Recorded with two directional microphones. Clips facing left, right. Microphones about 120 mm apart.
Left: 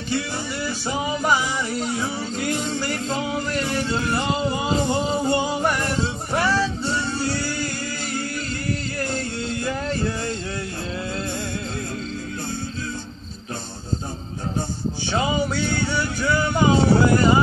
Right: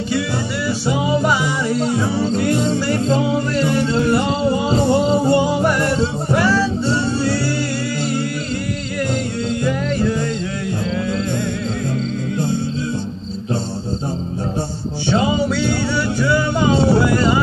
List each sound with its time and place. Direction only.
1.8 s music: 35° right (ahead or behind)
6.9 s music: 30° right (ahead or behind)
15.1 s music: 25° right (ahead or behind)